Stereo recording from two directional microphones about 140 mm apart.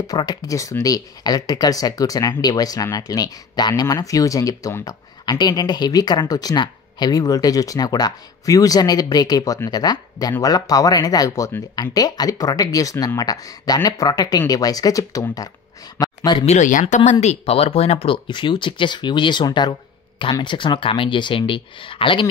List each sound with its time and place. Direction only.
0.0 s speech: 30° left (ahead or behind)
16.0 s a sound: 25° left (ahead or behind)
16.4 s speech: 60° left (ahead or behind); by 22.3 s 35° left (ahead or behind)